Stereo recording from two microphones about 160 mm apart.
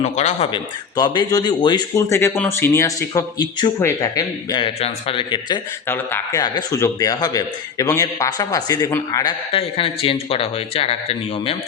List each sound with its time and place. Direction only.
0.0 s speech: 45° left (ahead or behind)
0.5 s a man's voice: 25° left (ahead or behind)
5.9 s speech: 15° left (ahead or behind)
6.4 s a man's voice: 25° left (ahead or behind)
9.5 s speech: 35° left (ahead or behind)